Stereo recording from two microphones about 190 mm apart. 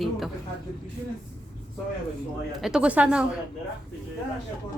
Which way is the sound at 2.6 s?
5° right (ahead or behind).